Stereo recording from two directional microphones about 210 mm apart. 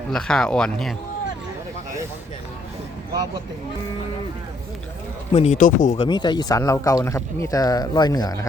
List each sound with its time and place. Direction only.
0.1 s speech: 5° left (ahead or behind)
5.3 s speech: 30° left (ahead or behind)
6.0 s speech: 20° left (ahead or behind)